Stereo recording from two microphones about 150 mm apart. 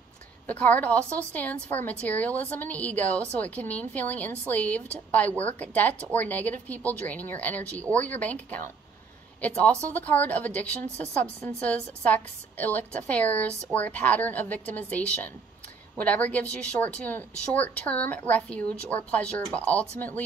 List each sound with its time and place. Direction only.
0.5 s a woman's voice: 10° left (ahead or behind)